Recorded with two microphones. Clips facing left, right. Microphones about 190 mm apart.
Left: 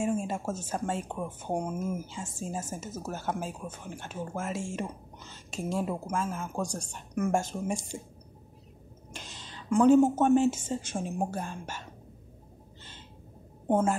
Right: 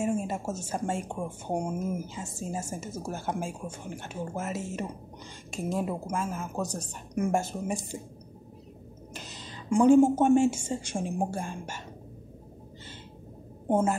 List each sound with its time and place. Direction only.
0.0 s speech: 10° right (ahead or behind)
9.7 s speech: 10° right (ahead or behind)
13.7 s a woman's voice: 10° right (ahead or behind)